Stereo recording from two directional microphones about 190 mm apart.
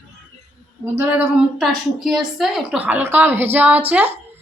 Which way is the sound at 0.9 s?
5° right (ahead or behind).